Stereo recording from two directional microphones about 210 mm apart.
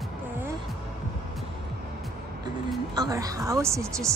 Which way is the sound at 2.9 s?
15° right (ahead or behind).